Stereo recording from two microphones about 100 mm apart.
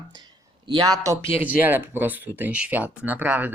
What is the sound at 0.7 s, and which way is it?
Speech, 45° right (ahead or behind).